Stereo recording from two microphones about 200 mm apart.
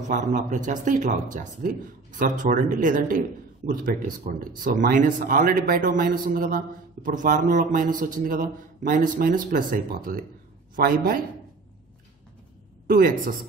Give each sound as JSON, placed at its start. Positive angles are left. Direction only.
{"t": 0.1, "sound": "speech", "side_deg": -40}
{"t": 12.8, "sound": "a woman's voice", "side_deg": -50}